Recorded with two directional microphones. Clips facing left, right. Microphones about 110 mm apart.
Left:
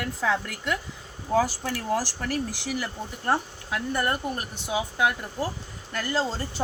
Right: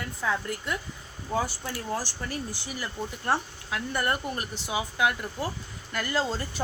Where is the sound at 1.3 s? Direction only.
90° left.